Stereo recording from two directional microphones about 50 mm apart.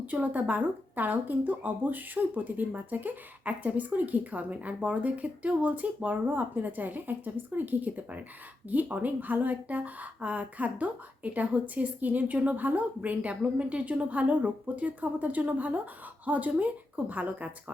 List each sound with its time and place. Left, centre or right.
0.0 s a woman's voice: right